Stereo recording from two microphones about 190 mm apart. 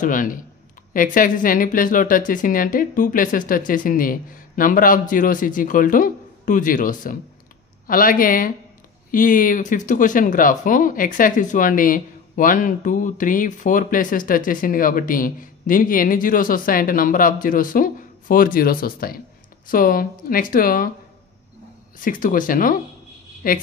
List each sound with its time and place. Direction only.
0.0 s speech: 45° left (ahead or behind)
22.0 s speech: 45° left (ahead or behind)